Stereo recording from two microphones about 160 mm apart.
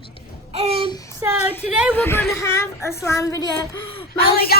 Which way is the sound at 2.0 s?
15° left (ahead or behind).